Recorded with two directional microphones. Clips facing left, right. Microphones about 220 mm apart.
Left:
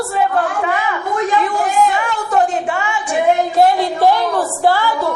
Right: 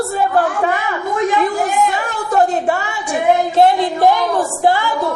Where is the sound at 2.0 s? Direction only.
40° right (ahead or behind).